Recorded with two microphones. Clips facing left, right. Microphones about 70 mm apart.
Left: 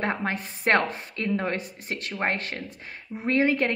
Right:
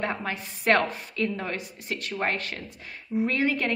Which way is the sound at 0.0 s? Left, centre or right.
Left.